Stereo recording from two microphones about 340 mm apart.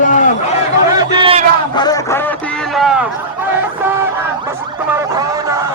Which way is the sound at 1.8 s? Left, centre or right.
Centre.